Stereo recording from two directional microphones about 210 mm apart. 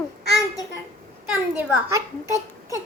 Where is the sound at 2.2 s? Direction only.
15° left (ahead or behind).